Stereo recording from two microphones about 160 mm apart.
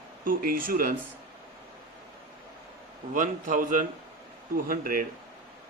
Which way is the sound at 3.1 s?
55° right (ahead or behind).